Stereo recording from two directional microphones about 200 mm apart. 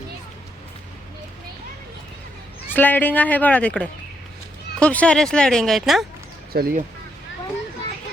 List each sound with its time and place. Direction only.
2.7 s speech: 10° left (ahead or behind)
6.5 s speech: 50° right (ahead or behind)